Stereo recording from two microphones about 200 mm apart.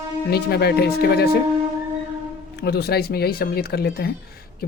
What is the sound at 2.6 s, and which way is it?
Speech, 50° left (ahead or behind).